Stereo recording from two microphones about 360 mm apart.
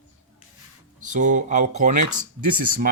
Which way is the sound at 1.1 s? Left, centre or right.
Right.